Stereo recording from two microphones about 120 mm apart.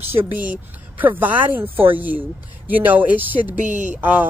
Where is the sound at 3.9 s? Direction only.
15° right (ahead or behind).